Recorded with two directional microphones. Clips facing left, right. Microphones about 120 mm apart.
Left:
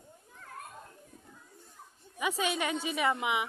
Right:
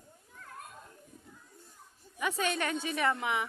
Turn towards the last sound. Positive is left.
turn(degrees=10)  # may be behind; listen again after turning